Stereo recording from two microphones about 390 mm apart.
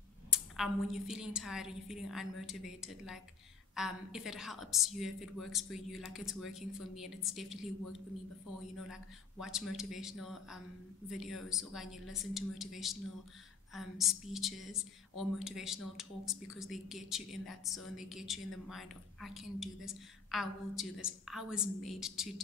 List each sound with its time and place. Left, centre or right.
0.3 s a woman's voice: centre